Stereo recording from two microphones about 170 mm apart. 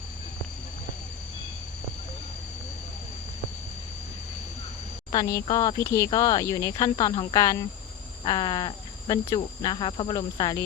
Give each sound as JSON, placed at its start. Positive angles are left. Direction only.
{"t": 5.1, "sound": "speech", "side_deg": 20}